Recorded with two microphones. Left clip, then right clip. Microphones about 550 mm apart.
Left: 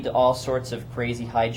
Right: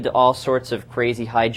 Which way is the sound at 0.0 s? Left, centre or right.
Right.